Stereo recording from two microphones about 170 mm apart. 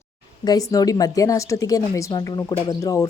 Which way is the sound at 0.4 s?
20° left (ahead or behind).